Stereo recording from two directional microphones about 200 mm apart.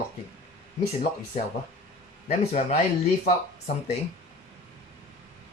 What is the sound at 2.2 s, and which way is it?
Speech, 35° left (ahead or behind).